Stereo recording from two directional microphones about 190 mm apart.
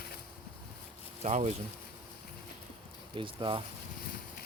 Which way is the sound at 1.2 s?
35° right (ahead or behind).